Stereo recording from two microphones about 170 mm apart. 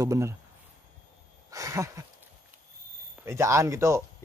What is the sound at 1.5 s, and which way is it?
Speech, 20° right (ahead or behind).